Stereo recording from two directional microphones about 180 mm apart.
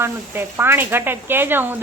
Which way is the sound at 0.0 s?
15° right (ahead or behind).